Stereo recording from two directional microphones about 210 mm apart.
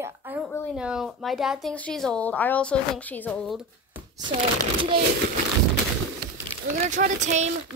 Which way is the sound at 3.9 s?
20° right (ahead or behind).